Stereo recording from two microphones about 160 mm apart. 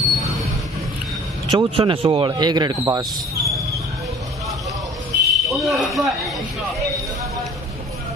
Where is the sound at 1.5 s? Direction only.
35° right (ahead or behind).